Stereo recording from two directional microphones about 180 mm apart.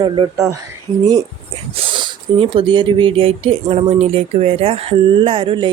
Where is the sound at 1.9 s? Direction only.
25° right (ahead or behind).